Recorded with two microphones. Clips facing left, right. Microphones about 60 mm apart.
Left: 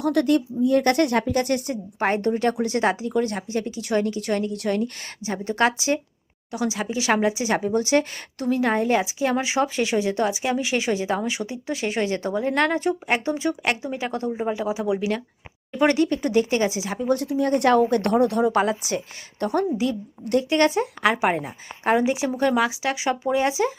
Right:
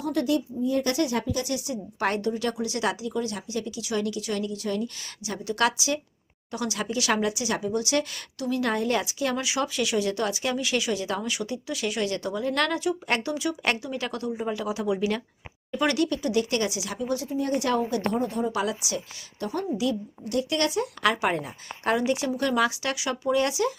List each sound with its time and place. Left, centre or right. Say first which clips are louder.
0.0 s speech: left 5 dB; left
2.0 s speech: left 4 dB; left
2.2 s speech: left 6 dB; left
5.2 s speech: left 4 dB; left
6.5 s speech: left 4 dB; centre
15.8 s speech: left 5 dB; left
17.0 s speech: left 6 dB; left
17.2 s a woman's voice: left 7 dB; left
18.5 s speech: left 6 dB; left
21.0 s speech: left 3 dB; left
22.6 s speech: left 2 dB; centre
23.0 s speech: left 2 dB; left